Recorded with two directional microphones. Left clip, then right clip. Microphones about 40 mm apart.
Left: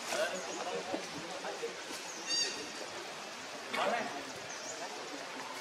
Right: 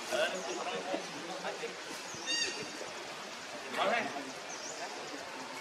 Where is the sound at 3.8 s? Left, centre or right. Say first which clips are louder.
Right 3 dB; right.